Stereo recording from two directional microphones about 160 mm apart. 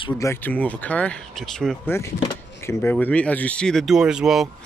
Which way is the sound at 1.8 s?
15° left (ahead or behind).